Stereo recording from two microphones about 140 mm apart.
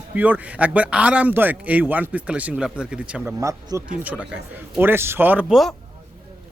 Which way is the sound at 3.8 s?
10° right (ahead or behind).